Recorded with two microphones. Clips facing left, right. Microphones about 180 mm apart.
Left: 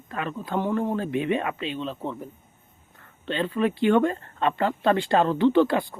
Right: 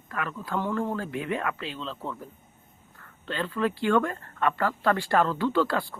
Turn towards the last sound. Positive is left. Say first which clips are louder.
# left 5 dB
turn(degrees=20)  # may be behind; listen again after turning